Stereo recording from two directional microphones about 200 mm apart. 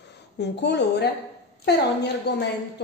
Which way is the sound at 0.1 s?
60° left (ahead or behind).